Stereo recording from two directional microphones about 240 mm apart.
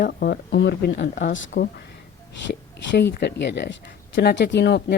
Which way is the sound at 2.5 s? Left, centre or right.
Left.